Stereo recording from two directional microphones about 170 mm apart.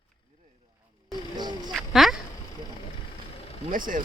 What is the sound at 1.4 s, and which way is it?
Speech, 25° right (ahead or behind).